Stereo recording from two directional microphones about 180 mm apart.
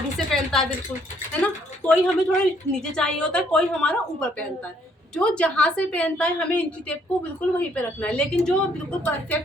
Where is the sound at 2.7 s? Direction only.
5° left (ahead or behind).